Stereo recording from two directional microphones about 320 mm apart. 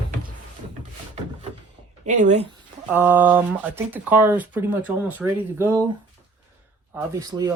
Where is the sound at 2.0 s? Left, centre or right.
Right.